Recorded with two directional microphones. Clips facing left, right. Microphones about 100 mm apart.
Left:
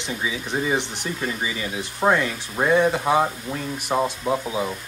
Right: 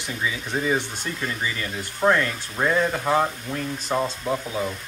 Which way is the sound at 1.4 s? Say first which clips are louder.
Left 1 dB; 15° left (ahead or behind).